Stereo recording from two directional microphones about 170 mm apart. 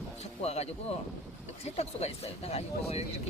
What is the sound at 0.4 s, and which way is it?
Speech, 40° left (ahead or behind).